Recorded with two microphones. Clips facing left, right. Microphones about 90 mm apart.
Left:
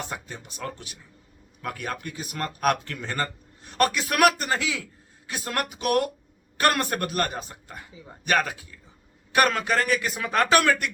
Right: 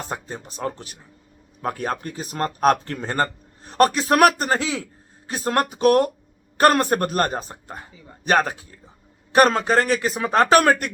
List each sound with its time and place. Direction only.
0.0 s speech: 35° right (ahead or behind)